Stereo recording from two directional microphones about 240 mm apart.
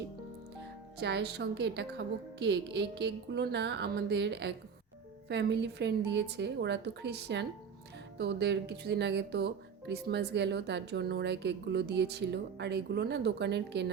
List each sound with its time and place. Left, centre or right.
0.9 s speech: right